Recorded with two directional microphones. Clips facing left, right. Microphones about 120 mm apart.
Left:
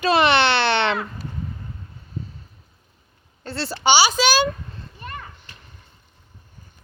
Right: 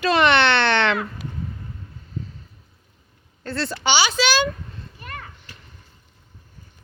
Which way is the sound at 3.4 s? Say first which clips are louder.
Right 2 dB; 25° left (ahead or behind).